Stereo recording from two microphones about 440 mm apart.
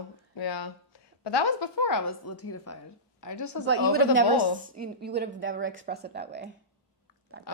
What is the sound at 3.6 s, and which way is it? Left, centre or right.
Speech, right.